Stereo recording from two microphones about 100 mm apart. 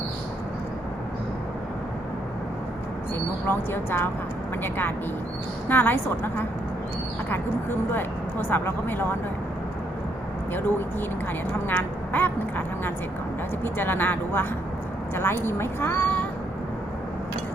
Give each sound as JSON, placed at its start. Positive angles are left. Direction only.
{"t": 3.4, "sound": "a woman's voice", "side_deg": 20}
{"t": 5.6, "sound": "a woman's voice", "side_deg": 20}
{"t": 11.7, "sound": "a woman's voice", "side_deg": 20}